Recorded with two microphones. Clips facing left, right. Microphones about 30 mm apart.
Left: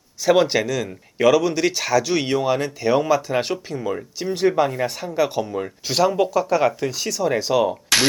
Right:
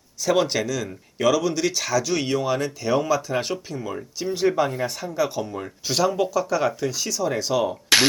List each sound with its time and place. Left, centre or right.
0.3 s speech: centre